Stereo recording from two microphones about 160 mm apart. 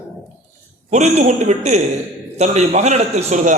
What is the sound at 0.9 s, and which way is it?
A man's voice, 50° right (ahead or behind).